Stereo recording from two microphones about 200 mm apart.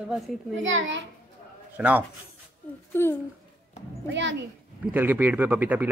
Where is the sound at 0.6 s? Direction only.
70° right (ahead or behind).